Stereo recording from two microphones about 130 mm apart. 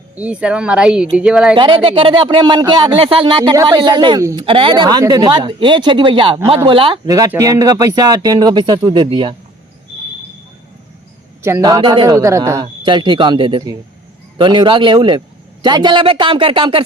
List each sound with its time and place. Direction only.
0.2 s speech: 10° right (ahead or behind)
1.5 s speech: 40° right (ahead or behind)
3.5 s speech: 25° right (ahead or behind)
4.2 s speech: 25° right (ahead or behind)
4.4 s speech: 45° right (ahead or behind)
7.3 s speech: 25° right (ahead or behind)
11.6 s speech: 30° right (ahead or behind)
12.6 s speech: 40° right (ahead or behind)